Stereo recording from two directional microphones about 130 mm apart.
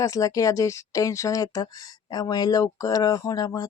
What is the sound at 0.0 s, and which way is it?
Speech, 25° left (ahead or behind).